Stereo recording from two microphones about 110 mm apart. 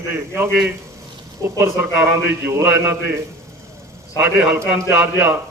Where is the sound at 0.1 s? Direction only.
20° right (ahead or behind).